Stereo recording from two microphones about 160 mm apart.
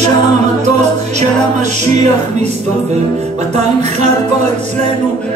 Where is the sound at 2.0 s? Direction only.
45° right (ahead or behind).